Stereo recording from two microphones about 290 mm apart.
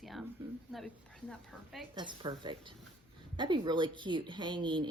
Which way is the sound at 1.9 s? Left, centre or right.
Centre.